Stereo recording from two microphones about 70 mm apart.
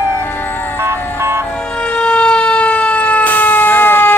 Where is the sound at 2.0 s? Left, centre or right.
Centre.